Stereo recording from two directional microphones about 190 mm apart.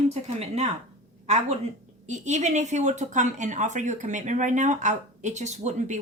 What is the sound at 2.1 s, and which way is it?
A woman's voice, 40° right (ahead or behind).